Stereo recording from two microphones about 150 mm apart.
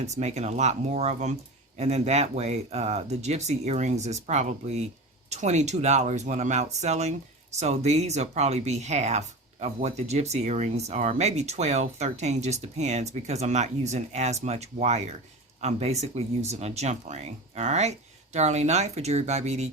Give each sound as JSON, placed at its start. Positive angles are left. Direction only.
{"t": 0.0, "sound": "speech", "side_deg": -50}